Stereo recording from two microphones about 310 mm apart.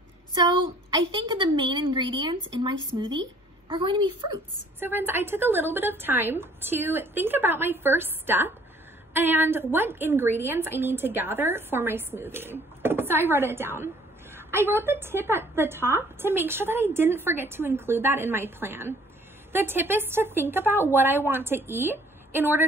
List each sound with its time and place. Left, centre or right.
0.3 s a woman's voice: centre